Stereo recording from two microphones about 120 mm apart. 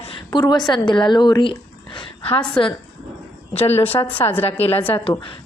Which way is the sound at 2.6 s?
45° left (ahead or behind).